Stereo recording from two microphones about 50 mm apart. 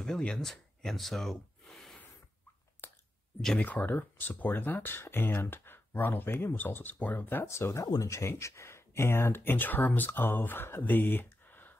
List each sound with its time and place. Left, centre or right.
0.2 s speech: centre
0.5 s a sound: centre
2.8 s clicking: left
3.5 s speech: left
7.4 s speech: left